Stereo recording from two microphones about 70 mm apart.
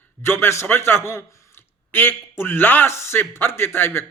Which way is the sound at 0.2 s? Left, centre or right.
Left.